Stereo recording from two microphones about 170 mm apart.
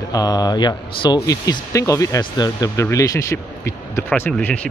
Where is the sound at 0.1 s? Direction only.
20° left (ahead or behind).